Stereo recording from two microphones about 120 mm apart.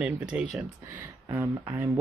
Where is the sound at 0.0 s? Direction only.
10° right (ahead or behind).